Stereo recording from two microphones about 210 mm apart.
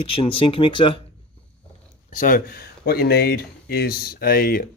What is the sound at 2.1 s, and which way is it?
Speech, 40° left (ahead or behind).